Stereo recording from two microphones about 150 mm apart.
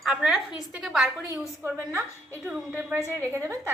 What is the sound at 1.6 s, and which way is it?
A woman's voice, 15° right (ahead or behind).